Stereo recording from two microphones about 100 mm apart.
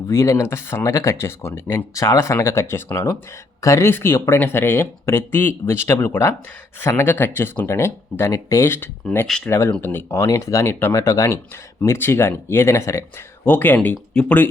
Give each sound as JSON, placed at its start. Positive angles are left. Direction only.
{"t": 0.1, "sound": "speech", "side_deg": 30}
{"t": 9.2, "sound": "speech", "side_deg": 5}
{"t": 9.5, "sound": "speech", "side_deg": 25}